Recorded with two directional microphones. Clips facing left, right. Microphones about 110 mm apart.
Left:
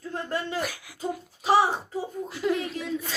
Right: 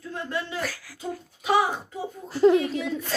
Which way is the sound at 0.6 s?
20° left (ahead or behind).